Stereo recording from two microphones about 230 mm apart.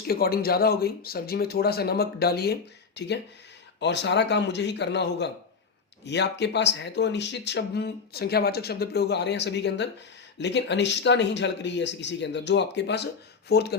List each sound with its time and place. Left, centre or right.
0.1 s speech: left